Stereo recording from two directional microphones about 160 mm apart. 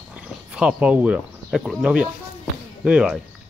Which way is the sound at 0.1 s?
5° right (ahead or behind).